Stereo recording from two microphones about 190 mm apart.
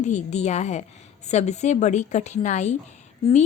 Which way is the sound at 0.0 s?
35° left (ahead or behind).